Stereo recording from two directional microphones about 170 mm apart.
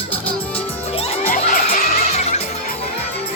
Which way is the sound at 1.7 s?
40° left (ahead or behind).